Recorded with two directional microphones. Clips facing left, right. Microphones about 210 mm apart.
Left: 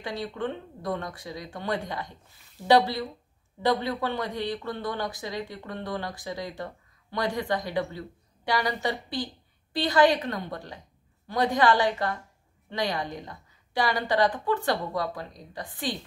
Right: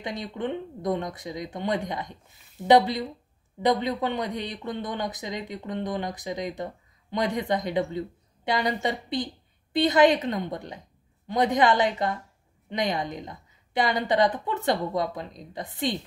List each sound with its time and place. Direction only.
0.0 s speech: 20° right (ahead or behind)